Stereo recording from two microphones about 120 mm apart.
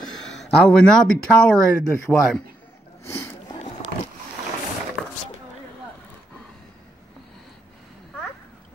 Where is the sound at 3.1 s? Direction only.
20° left (ahead or behind).